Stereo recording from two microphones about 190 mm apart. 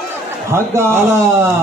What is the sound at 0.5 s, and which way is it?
A man's voice, 15° right (ahead or behind).